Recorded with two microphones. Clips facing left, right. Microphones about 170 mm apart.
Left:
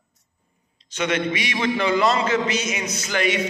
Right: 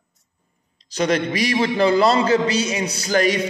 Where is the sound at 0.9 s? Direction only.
35° right (ahead or behind).